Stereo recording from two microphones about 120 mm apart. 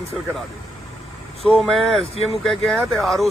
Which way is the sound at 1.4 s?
Centre (ahead or behind).